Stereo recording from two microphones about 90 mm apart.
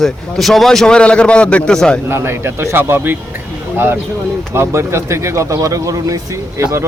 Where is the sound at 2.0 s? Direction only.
25° right (ahead or behind).